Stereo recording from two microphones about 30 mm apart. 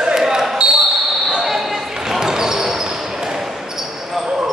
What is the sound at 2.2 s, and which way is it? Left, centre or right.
Basketball bounce, centre.